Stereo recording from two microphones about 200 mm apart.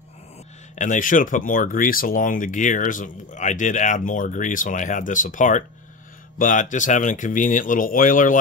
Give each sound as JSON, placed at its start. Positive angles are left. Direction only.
{"t": 0.7, "sound": "speech", "side_deg": 40}